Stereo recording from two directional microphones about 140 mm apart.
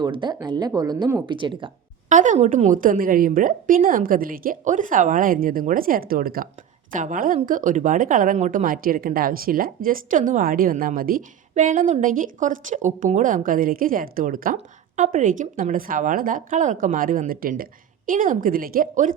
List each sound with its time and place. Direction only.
0.0 s a woman's voice: 30° right (ahead or behind)
2.0 s a woman's voice: 65° right (ahead or behind); by 6.5 s 90° right
6.9 s speech: 70° right (ahead or behind)